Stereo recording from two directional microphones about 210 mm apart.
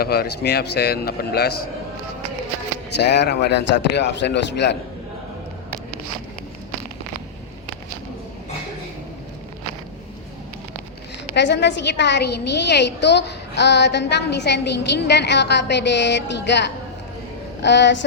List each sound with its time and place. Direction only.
0.0 s a man's voice: 50° left (ahead or behind)
3.2 s a man's voice: 55° left (ahead or behind)
11.3 s a woman's voice: 55° left (ahead or behind)